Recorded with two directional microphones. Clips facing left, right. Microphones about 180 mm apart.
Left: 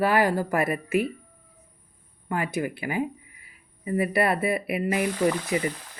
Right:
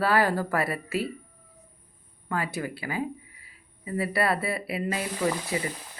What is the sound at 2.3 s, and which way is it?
Speech, 15° left (ahead or behind).